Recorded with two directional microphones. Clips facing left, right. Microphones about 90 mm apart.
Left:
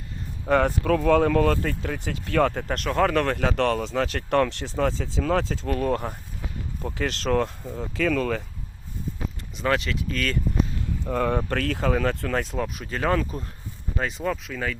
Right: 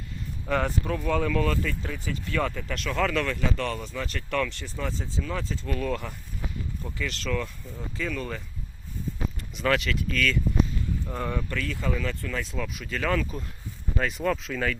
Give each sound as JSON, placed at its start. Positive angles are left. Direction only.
{"t": 0.4, "sound": "speech", "side_deg": 50}
{"t": 0.9, "sound": "speech", "side_deg": 70}
{"t": 4.1, "sound": "speech", "side_deg": 45}
{"t": 4.6, "sound": "speech", "side_deg": 90}
{"t": 5.7, "sound": "speech", "side_deg": 45}
{"t": 6.9, "sound": "speech", "side_deg": 60}
{"t": 9.6, "sound": "speech", "side_deg": 30}
{"t": 11.0, "sound": "speech", "side_deg": 65}
{"t": 14.3, "sound": "speech", "side_deg": 10}